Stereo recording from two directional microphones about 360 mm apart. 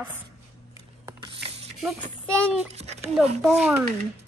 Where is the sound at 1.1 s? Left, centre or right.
Centre.